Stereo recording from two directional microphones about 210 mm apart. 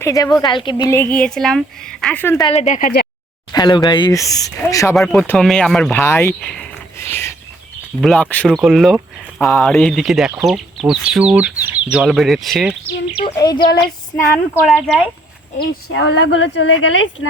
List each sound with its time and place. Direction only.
0.0 s speech: 15° left (ahead or behind)
2.4 s speech: 30° left (ahead or behind)
3.5 s speech: 20° left (ahead or behind)
4.9 s speech: 5° left (ahead or behind)
6.0 s speech: 10° left (ahead or behind)
6.4 s a sound: 5° left (ahead or behind)
8.0 s speech: 5° left (ahead or behind)
13.3 s speech: 20° left (ahead or behind)
14.8 s speech: centre (ahead or behind)
15.5 s speech: 55° left (ahead or behind)